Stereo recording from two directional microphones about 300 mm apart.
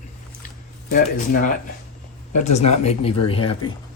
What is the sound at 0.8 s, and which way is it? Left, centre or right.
Speech, left.